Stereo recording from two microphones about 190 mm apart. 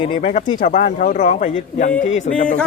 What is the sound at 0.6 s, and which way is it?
A man's voice, 40° left (ahead or behind).